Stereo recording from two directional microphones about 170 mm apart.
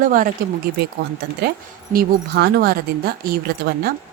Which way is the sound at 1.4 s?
70° right (ahead or behind).